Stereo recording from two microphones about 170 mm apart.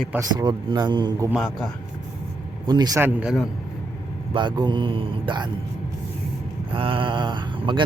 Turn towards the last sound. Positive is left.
turn(degrees=-30)  # may be behind; listen again after turning